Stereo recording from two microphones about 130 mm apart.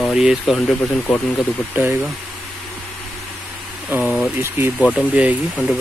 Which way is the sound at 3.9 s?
15° right (ahead or behind).